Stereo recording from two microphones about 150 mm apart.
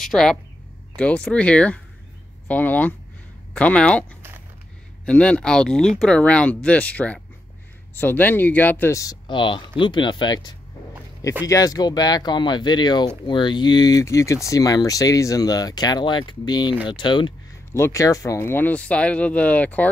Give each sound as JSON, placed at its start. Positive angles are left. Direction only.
{"t": 0.0, "sound": "speech", "side_deg": 5}
{"t": 5.0, "sound": "speech", "side_deg": 5}
{"t": 17.7, "sound": "speech", "side_deg": 20}